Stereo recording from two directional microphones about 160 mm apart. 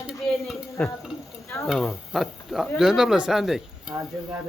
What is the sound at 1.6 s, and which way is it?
Speech, centre (ahead or behind).